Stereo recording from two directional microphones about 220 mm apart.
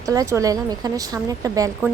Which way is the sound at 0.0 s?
15° right (ahead or behind).